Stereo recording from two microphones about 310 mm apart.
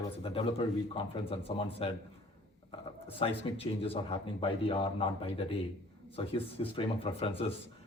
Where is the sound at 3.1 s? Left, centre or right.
Centre.